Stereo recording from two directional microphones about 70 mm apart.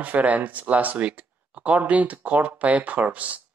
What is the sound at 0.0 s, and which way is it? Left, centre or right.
Speech, right.